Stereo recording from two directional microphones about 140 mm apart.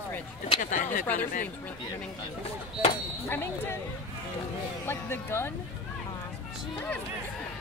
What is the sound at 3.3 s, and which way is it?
Speech, 20° left (ahead or behind).